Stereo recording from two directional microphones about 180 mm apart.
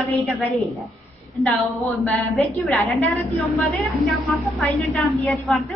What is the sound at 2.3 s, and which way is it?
A woman's voice, 5° left (ahead or behind).